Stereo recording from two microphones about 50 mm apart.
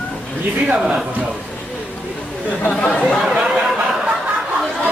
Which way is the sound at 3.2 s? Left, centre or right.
Centre.